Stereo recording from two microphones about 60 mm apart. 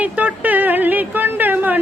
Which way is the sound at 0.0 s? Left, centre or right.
Right.